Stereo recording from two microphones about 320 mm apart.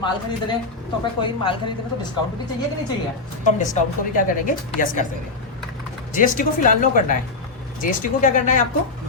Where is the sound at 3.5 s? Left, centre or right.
Left.